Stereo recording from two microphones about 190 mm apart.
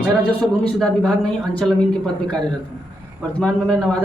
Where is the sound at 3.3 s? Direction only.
5° left (ahead or behind).